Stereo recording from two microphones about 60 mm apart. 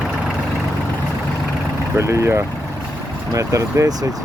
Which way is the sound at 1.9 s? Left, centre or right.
Right.